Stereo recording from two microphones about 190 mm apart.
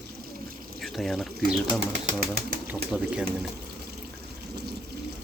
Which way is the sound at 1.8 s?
40° right (ahead or behind).